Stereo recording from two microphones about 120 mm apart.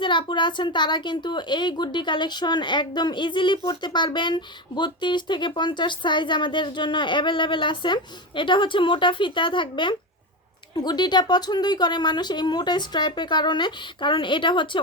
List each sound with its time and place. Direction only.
0.0 s speech: 40° left (ahead or behind)